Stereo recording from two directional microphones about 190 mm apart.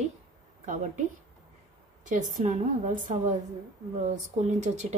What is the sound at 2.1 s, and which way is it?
Speech, 40° right (ahead or behind).